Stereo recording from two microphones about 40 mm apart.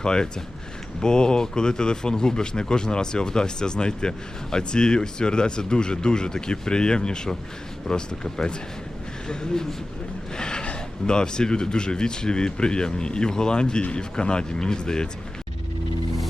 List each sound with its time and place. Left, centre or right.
0.0 s speech: left